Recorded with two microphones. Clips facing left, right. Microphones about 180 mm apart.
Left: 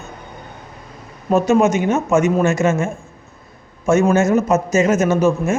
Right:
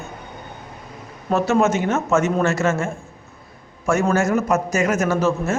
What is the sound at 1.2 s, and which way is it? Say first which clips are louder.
Speech: left 4 dB; 15° left (ahead or behind).